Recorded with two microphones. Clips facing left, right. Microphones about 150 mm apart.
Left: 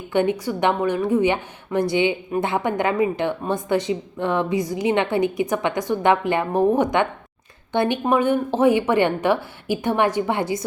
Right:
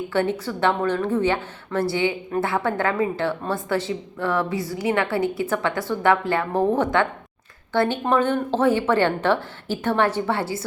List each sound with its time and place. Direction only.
0.1 s a woman's voice: 15° left (ahead or behind)